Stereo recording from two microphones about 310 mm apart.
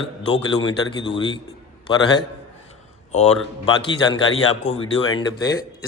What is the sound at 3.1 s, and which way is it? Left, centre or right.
A man's voice, centre.